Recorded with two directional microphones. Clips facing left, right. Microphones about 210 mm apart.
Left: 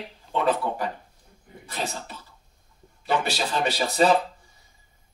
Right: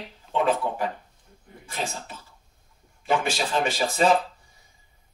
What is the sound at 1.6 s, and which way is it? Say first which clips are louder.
Speech: even; 40° left (ahead or behind).